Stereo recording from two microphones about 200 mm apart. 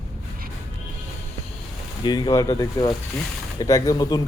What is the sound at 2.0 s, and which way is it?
Speech, 20° left (ahead or behind).